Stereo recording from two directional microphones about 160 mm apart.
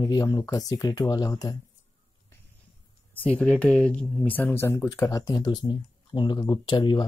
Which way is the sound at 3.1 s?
10° left (ahead or behind).